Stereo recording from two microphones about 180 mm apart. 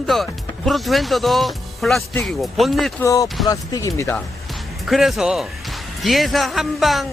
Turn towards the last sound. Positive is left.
turn(degrees=0)  # may be behind; listen again after turning